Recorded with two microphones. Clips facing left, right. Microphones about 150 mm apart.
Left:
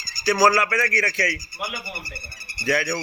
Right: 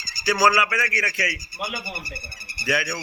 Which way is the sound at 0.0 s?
90° right.